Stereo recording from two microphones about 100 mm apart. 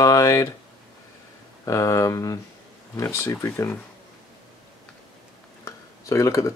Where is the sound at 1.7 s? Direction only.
35° left (ahead or behind).